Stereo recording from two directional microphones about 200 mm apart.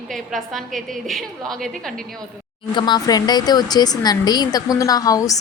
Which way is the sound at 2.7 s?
20° left (ahead or behind).